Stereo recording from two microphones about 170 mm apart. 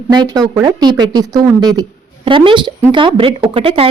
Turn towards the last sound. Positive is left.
turn(degrees=-35)  # may be behind; listen again after turning